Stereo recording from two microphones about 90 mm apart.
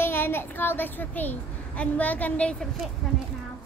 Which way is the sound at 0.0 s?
25° left (ahead or behind).